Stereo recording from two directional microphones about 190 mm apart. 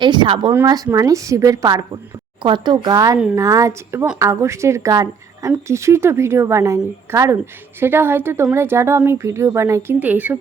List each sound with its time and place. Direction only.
0.0 s a woman's voice: 25° right (ahead or behind); by 10.3 s 10° right (ahead or behind)